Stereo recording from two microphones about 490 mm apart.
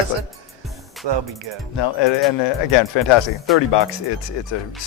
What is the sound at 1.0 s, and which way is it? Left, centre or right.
Speech, right.